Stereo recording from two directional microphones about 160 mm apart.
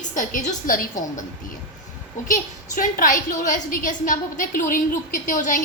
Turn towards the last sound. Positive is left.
turn(degrees=55)  # may be behind; listen again after turning